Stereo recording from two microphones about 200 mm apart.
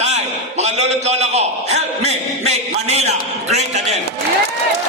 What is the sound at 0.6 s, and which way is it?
A man's voice, 35° right (ahead or behind).